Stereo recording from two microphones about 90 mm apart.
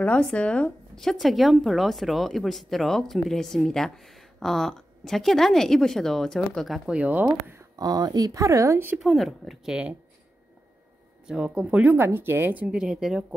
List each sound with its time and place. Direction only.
0.0 s speech: 10° left (ahead or behind)
6.9 s speech: 15° right (ahead or behind)
7.7 s speech: 45° right (ahead or behind)
8.9 s speech: centre (ahead or behind)
11.2 s speech: 10° right (ahead or behind)